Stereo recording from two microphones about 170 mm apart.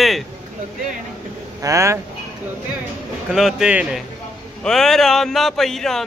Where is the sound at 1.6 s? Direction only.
15° right (ahead or behind).